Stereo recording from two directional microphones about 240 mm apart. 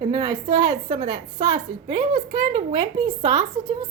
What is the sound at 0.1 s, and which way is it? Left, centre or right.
A woman's voice, centre.